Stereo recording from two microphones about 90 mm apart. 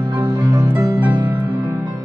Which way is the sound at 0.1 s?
60° right (ahead or behind).